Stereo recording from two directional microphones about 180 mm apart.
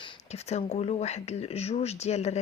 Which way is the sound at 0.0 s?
35° left (ahead or behind).